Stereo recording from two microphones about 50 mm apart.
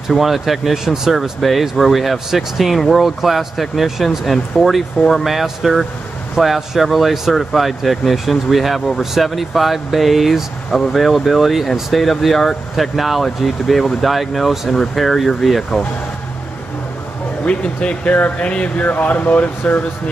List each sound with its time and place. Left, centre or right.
0.1 s speech: centre
17.5 s speech: left
19.6 s speech: left